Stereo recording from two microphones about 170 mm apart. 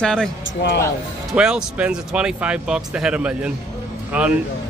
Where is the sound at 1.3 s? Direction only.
5° right (ahead or behind).